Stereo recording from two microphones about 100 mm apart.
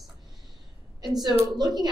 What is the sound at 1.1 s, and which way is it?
Speech, 45° right (ahead or behind).